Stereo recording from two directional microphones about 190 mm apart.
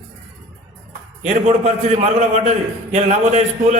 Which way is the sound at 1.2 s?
35° right (ahead or behind).